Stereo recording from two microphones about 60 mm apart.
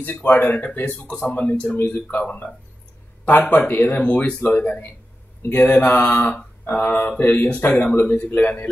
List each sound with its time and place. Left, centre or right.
0.0 s speech: left
1.8 s mantra: left
2.0 s speech: left
4.0 s speech: centre
5.4 s mantra: left
6.6 s speech: left